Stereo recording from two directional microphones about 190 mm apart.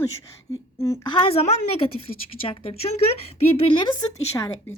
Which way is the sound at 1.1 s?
30° left (ahead or behind).